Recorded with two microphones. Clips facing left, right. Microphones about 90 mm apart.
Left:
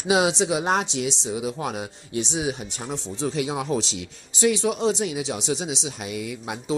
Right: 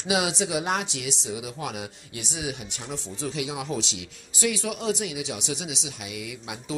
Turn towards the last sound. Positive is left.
turn(degrees=40)  # may be behind; listen again after turning